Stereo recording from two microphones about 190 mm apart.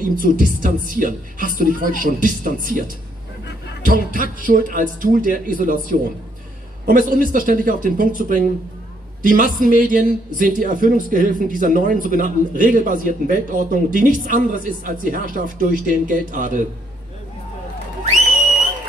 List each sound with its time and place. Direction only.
0.0 s a man's voice: 45° right (ahead or behind)
3.8 s a man's voice: 45° right (ahead or behind)